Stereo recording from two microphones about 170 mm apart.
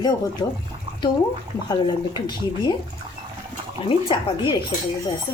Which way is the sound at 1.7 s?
25° left (ahead or behind).